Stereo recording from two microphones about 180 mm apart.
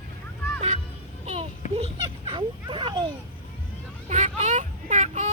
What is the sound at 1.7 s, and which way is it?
Children playing, 30° right (ahead or behind).